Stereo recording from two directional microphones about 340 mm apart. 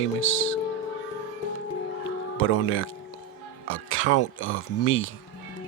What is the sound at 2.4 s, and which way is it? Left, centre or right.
Speech, left.